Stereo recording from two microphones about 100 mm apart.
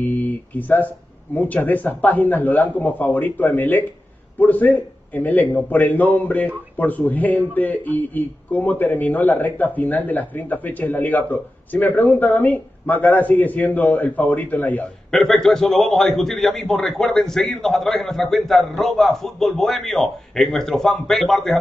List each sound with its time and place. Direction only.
0.0 s a man's voice: 20° left (ahead or behind)
15.0 s a man's voice: 5° left (ahead or behind)